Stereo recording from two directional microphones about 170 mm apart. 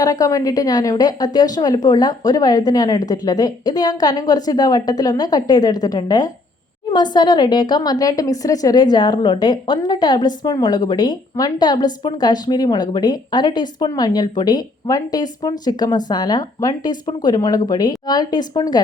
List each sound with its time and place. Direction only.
0.0 s a woman's voice: 20° left (ahead or behind)